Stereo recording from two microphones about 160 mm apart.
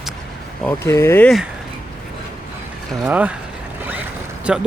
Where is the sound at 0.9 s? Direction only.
15° left (ahead or behind).